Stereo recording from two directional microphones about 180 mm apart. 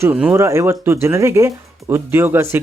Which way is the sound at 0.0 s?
10° right (ahead or behind).